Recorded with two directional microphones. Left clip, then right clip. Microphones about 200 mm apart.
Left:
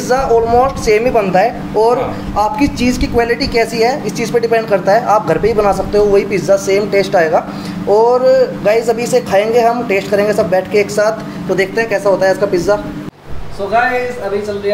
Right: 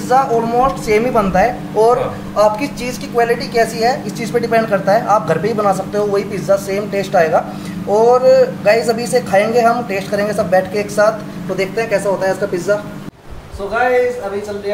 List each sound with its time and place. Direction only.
0.1 s speech: 20° left (ahead or behind)